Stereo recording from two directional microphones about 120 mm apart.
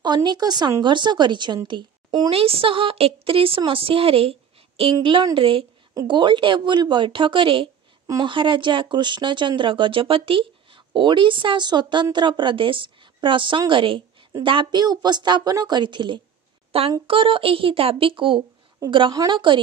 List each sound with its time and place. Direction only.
0.0 s speech: 40° right (ahead or behind)
2.3 s speech: 55° right (ahead or behind)
4.9 s speech: 40° right (ahead or behind)
16.7 s speech: 55° right (ahead or behind)